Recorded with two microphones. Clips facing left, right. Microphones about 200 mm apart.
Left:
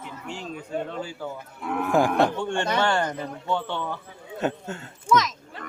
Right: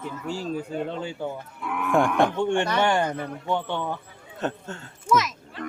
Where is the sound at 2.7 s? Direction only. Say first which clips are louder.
Right 1 dB; 15° right (ahead or behind).